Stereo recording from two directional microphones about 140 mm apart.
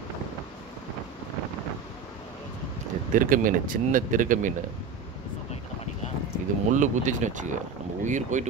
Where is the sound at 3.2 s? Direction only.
75° right (ahead or behind).